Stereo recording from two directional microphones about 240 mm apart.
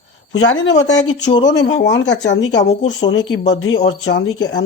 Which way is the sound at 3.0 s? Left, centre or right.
Left.